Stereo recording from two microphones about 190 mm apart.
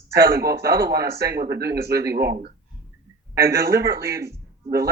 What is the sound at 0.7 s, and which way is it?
Speech, 55° right (ahead or behind).